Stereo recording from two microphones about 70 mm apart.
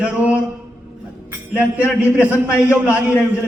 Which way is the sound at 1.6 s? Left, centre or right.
Right.